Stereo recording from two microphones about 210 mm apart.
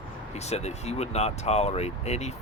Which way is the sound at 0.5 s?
30° left (ahead or behind).